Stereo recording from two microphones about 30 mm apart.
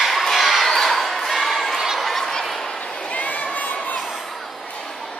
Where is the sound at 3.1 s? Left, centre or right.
Left.